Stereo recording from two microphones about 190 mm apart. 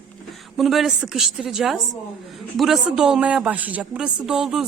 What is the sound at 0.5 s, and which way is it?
Speech, centre (ahead or behind).